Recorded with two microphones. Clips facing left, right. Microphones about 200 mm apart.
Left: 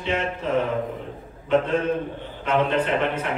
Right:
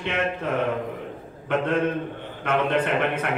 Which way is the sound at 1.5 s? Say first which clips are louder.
Left 2 dB; 55° right (ahead or behind).